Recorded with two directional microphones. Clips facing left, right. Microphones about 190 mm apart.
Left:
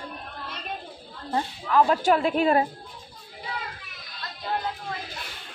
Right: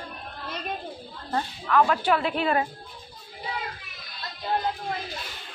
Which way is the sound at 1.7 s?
35° left (ahead or behind).